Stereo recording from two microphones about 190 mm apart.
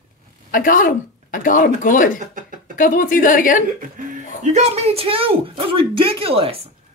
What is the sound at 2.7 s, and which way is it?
Speech, 45° left (ahead or behind).